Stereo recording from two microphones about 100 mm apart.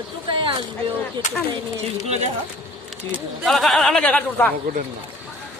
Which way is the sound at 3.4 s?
Centre (ahead or behind).